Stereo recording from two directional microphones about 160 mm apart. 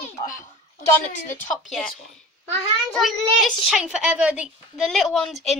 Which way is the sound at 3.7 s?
5° right (ahead or behind).